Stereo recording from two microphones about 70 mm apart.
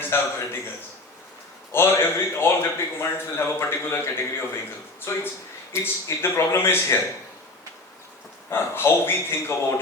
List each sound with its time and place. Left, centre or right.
0.0 s a man's voice: left
1.7 s a man's voice: left
8.4 s a man's voice: left